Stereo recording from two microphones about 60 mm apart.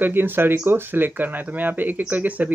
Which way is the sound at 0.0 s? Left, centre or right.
Right.